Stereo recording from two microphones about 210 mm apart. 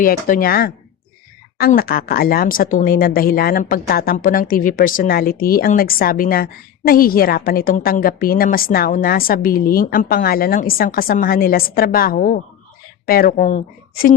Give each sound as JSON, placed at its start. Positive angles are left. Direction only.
{"t": 0.0, "sound": "speech", "side_deg": 40}